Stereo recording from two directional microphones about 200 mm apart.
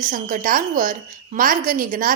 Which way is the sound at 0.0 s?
40° right (ahead or behind).